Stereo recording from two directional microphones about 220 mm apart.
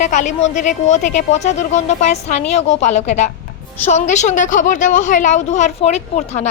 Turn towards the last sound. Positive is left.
turn(degrees=30)  # may be behind; listen again after turning